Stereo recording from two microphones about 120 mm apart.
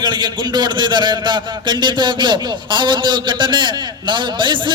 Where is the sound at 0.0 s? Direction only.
40° right (ahead or behind).